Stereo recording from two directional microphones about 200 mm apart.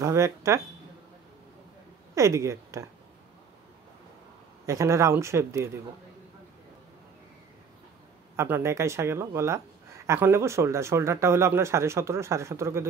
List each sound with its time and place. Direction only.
0.0 s speech: 15° right (ahead or behind)
2.1 s speech: 15° right (ahead or behind)
4.6 s speech: 15° right (ahead or behind)
8.4 s speech: 15° right (ahead or behind)